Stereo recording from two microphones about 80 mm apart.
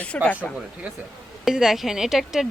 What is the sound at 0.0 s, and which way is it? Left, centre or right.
Speech, centre.